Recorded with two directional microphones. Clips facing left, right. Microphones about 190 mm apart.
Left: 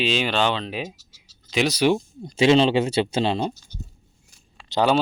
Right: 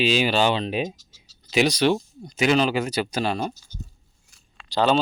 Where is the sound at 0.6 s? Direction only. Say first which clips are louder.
Right 4 dB; 20° right (ahead or behind).